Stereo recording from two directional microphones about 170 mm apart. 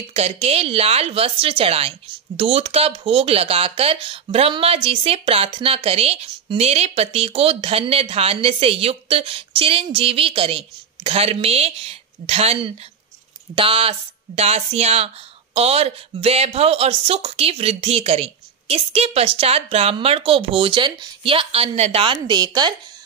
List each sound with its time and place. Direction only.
0.1 s speech: 35° right (ahead or behind)